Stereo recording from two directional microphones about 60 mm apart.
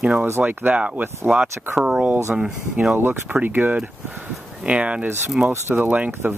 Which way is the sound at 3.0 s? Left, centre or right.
Right.